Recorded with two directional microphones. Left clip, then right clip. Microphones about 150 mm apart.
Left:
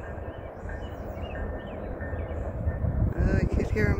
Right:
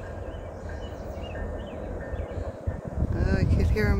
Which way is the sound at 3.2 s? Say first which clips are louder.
Even; 25° right (ahead or behind).